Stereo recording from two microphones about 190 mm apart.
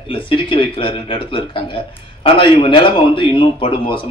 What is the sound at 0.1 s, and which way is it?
A man's voice, 25° left (ahead or behind).